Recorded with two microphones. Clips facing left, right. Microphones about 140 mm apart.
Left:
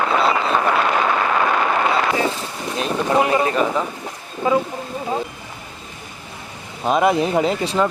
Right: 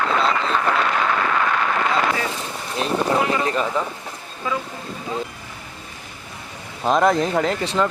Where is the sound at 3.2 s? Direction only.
25° left (ahead or behind).